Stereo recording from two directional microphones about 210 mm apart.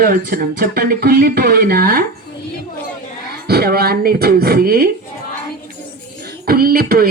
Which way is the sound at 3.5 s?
50° right (ahead or behind).